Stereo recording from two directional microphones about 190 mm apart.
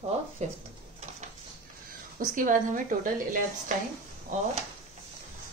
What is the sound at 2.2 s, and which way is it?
A woman's voice, 45° right (ahead or behind).